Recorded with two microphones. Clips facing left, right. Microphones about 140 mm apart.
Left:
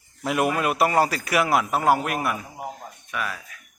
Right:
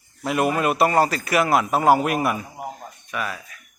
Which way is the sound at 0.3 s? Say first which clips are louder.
Right 2 dB; 10° left (ahead or behind).